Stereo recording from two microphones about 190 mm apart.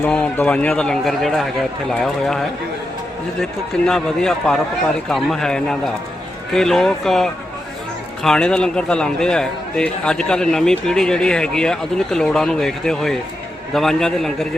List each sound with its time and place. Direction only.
0.0 s a man's voice: 5° left (ahead or behind)
3.8 s a man's voice: 5° left (ahead or behind)